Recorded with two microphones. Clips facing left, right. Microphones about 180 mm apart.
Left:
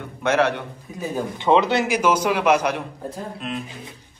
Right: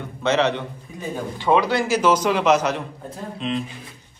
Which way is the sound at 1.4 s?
25° left (ahead or behind).